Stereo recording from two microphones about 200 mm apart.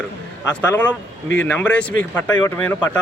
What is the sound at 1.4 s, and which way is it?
Speech, 5° left (ahead or behind).